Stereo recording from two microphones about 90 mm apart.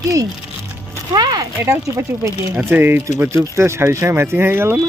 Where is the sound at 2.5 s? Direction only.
20° right (ahead or behind).